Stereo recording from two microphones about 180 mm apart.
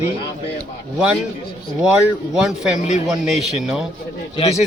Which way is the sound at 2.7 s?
40° left (ahead or behind).